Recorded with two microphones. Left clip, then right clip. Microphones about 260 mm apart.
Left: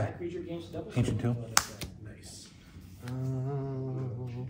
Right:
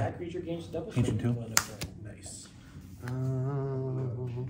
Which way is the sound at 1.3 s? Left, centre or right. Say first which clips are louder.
Even; left.